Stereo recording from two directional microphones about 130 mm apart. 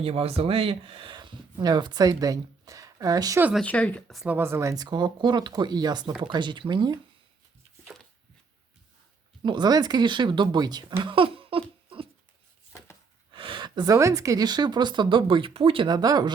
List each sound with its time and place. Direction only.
0.0 s speech: 50° right (ahead or behind); by 3.4 s 25° right (ahead or behind)
3.5 s speech: 10° left (ahead or behind)
4.3 s speech: 20° right (ahead or behind); by 7.0 s 35° right (ahead or behind)
9.4 s speech: 35° right (ahead or behind)
11.0 s a sound: 45° right (ahead or behind)
13.3 s speech: 40° right (ahead or behind)